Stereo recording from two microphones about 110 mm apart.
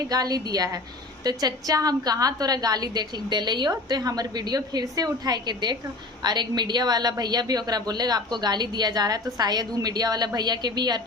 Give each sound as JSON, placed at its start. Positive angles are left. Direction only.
{"t": 0.1, "sound": "a woman's voice", "side_deg": -35}